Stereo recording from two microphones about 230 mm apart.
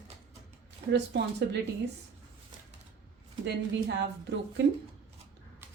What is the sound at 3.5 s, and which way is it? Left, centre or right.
A woman's voice, right.